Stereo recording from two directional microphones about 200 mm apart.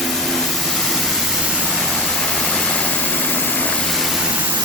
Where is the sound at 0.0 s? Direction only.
Centre (ahead or behind).